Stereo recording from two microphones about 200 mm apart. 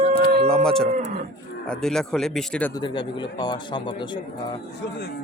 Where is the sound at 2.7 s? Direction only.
20° left (ahead or behind).